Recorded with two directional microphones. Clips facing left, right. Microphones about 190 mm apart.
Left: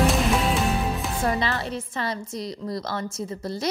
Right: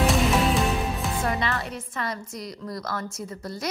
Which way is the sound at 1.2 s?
30° left (ahead or behind).